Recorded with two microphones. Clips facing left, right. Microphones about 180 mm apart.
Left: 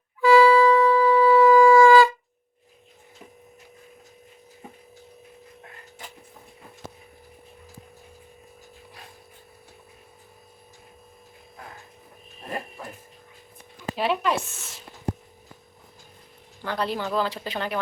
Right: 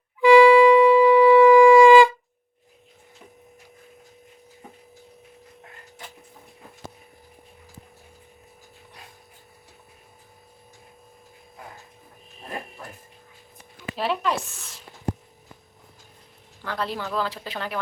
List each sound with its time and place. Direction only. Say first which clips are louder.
0.2 s shofar: right 3 dB; 15° right (ahead or behind)
13.9 s a sound: left 1 dB; centre (ahead or behind)
16.6 s speech: left 2 dB; centre (ahead or behind)